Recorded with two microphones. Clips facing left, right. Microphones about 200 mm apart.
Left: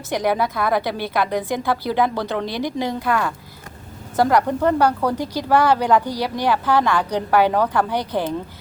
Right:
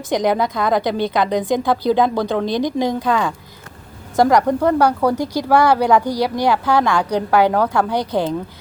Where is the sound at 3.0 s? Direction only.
5° left (ahead or behind).